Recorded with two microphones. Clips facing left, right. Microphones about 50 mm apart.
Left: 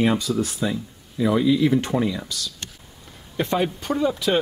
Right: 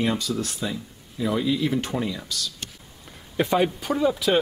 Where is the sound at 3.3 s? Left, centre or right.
Centre.